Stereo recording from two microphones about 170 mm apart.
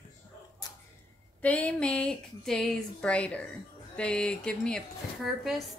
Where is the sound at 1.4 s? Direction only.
10° left (ahead or behind).